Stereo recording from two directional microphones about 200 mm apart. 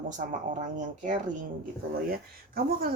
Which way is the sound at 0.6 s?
40° right (ahead or behind).